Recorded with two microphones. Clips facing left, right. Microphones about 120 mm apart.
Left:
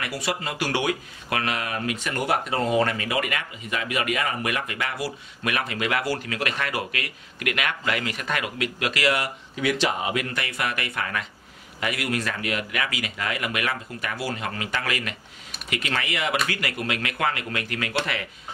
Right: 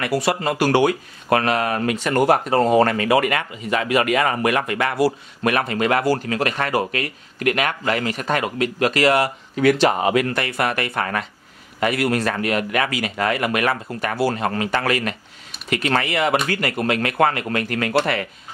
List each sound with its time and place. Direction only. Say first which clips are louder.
0.0 s speech: right 10 dB; 45° right (ahead or behind)
0.3 s speech: right 8 dB; 55° right (ahead or behind)
4.9 s speech: right 11 dB; 40° right (ahead or behind)